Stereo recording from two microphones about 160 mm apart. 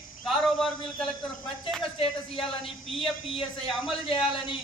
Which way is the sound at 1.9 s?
35° left (ahead or behind).